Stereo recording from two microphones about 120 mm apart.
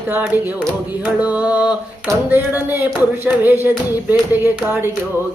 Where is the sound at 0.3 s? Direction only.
15° right (ahead or behind).